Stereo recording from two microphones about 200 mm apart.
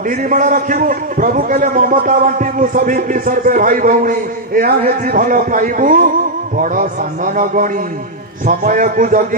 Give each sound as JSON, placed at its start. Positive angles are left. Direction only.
{"t": 0.1, "sound": "a man's voice", "side_deg": -40}